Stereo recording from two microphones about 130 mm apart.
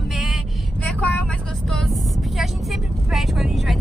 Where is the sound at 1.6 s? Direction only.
5° left (ahead or behind).